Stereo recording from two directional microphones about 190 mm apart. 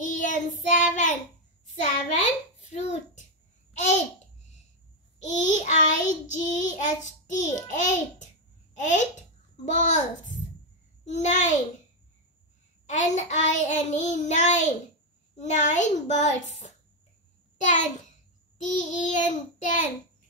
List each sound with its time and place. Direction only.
0.0 s child singing: 40° left (ahead or behind)
1.8 s a child's voice: 40° left (ahead or behind)
3.7 s babbling: 40° left (ahead or behind)
6.2 s child singing: 40° left (ahead or behind)
8.7 s a child's voice: 40° left (ahead or behind)
9.7 s child singing: 40° left (ahead or behind)
12.8 s child singing: 40° left (ahead or behind)
17.6 s a child's voice: 40° left (ahead or behind)
18.6 s child singing: 40° left (ahead or behind)